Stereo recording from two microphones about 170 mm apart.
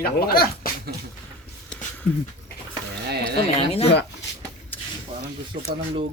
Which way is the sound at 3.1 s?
70° right (ahead or behind).